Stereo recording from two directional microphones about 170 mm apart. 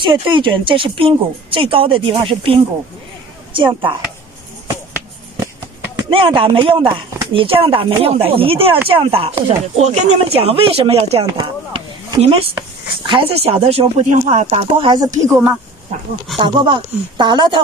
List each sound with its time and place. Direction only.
0.0 s speech: 25° right (ahead or behind)
6.0 s speech: 30° right (ahead or behind)
11.3 s speech: 25° right (ahead or behind)